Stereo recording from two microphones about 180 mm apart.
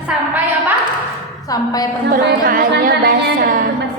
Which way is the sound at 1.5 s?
20° left (ahead or behind).